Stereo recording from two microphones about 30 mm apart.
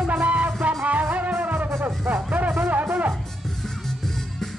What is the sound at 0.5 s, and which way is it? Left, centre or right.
Music, right.